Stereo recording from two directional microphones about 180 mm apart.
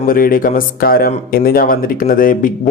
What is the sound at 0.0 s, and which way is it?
Speech, 50° left (ahead or behind).